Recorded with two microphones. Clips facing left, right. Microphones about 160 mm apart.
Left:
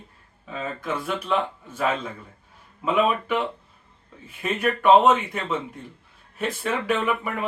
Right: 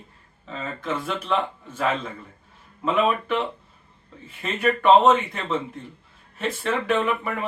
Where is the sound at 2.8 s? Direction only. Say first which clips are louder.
Even; 5° left (ahead or behind).